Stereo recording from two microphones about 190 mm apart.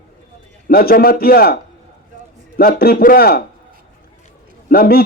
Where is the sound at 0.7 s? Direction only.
55° left (ahead or behind).